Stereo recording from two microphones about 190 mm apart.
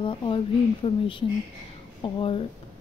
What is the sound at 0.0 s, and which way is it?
A woman's voice, 25° left (ahead or behind).